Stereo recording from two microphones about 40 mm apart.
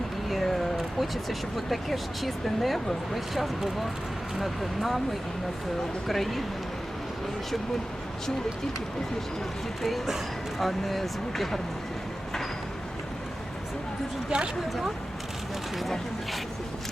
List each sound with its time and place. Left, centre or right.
0.3 s a sound: centre
0.8 s speech: centre
6.1 s speech: centre
10.6 s speech: centre
14.3 s speech: right
15.8 s speech: centre